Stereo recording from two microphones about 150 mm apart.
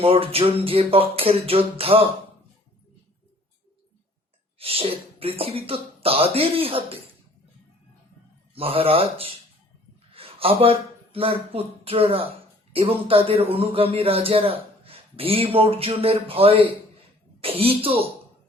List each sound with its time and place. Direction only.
0.0 s a man's voice: 40° right (ahead or behind)
4.5 s a man's voice: 40° right (ahead or behind)
8.5 s a man's voice: 40° right (ahead or behind)